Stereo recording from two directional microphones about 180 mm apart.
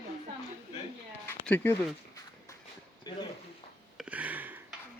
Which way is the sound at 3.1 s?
25° left (ahead or behind).